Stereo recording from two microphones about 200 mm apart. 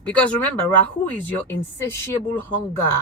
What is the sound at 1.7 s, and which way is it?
Speech, 15° left (ahead or behind).